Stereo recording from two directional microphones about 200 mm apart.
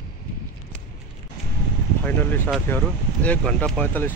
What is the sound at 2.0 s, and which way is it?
Speech, 10° left (ahead or behind).